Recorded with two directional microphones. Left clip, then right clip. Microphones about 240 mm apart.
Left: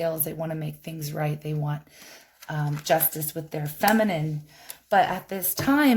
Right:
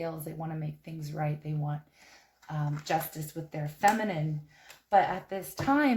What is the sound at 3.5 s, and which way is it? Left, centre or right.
Speech, left.